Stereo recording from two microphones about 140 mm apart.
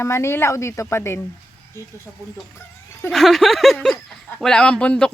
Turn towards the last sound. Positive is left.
turn(degrees=5)  # may be behind; listen again after turning